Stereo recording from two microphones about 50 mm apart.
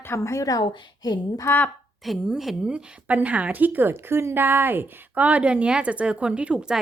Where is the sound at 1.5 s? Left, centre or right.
Left.